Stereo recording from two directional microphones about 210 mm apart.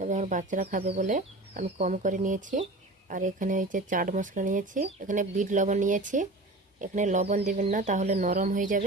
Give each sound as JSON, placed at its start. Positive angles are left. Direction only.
{"t": 0.0, "sound": "speech", "side_deg": -35}